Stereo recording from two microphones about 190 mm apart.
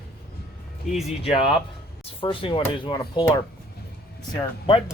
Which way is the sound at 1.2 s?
30° left (ahead or behind).